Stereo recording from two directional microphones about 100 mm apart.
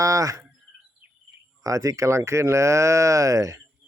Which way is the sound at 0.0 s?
35° right (ahead or behind).